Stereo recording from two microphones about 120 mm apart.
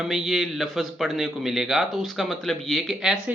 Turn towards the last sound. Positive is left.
turn(degrees=5)  # may be behind; listen again after turning